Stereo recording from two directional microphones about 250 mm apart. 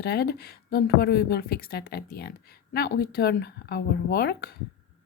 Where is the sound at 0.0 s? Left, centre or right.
Left.